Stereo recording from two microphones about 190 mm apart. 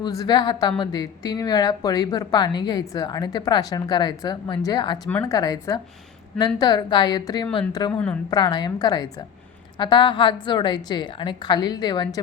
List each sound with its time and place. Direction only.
0.0 s speech: 20° left (ahead or behind)
7.9 s speech: 10° left (ahead or behind)
8.3 s speech: 20° left (ahead or behind)